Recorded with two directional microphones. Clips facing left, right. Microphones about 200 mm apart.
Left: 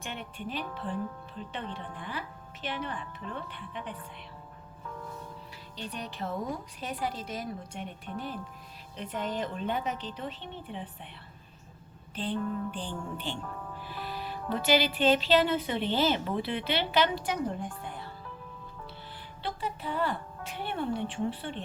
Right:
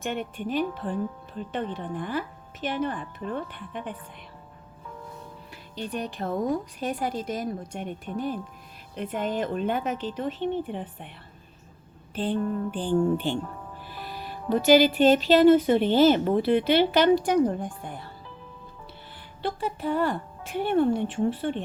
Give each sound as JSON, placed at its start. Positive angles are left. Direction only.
{"t": 0.0, "sound": "a woman's voice", "side_deg": -50}
{"t": 5.7, "sound": "a woman's voice", "side_deg": -50}
{"t": 12.1, "sound": "a woman's voice", "side_deg": -50}
{"t": 14.5, "sound": "a woman's voice", "side_deg": -45}
{"t": 19.4, "sound": "a woman's voice", "side_deg": -45}